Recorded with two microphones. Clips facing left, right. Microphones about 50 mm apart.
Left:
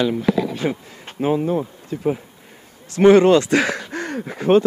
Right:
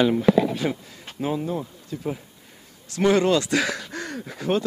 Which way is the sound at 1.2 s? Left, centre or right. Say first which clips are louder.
Left 7 dB; left.